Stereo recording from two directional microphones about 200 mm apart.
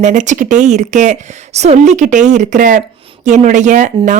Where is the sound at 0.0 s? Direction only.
40° right (ahead or behind).